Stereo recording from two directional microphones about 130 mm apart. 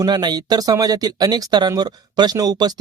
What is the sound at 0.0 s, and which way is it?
Speech, 35° right (ahead or behind).